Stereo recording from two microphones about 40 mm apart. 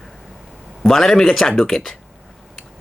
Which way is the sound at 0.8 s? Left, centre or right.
Centre.